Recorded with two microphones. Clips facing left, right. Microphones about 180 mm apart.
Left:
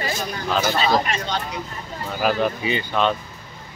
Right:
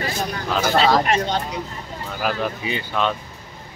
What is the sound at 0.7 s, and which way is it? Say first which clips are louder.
Speech: right 4 dB; 75° right (ahead or behind).